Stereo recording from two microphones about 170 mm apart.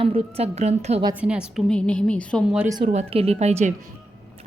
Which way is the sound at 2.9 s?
35° right (ahead or behind).